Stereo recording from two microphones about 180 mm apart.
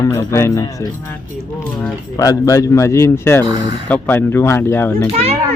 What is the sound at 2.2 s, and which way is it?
A man's voice, 20° left (ahead or behind).